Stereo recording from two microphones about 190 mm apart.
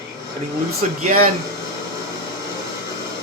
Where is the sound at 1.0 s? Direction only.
45° right (ahead or behind).